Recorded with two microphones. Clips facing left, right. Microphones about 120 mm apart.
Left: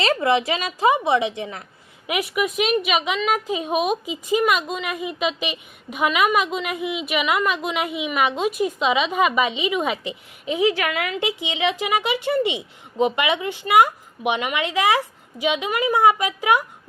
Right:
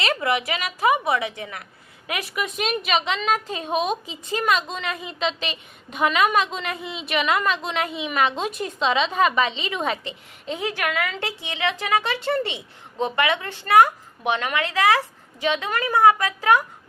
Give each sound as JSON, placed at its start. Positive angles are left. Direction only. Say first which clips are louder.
{"t": 0.0, "sound": "a woman's voice", "louder": "left 4 dB", "side_deg": 30}